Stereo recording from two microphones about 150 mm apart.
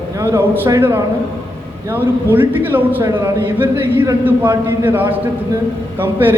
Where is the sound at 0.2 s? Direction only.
15° right (ahead or behind).